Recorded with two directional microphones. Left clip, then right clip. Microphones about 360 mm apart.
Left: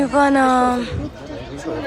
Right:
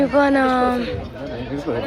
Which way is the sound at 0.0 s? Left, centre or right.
Centre.